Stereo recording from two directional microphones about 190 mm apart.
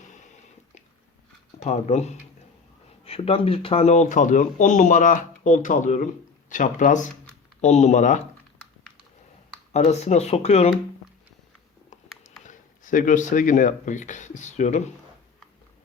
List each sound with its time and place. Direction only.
1.5 s speech: 35° left (ahead or behind)
9.7 s speech: 35° left (ahead or behind)
12.4 s speech: 45° left (ahead or behind)